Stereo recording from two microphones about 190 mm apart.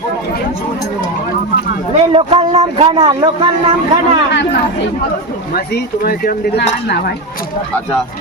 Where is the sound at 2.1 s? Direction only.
30° right (ahead or behind).